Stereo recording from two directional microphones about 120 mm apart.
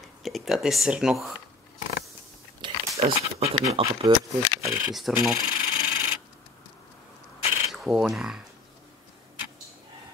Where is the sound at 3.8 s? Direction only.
50° right (ahead or behind).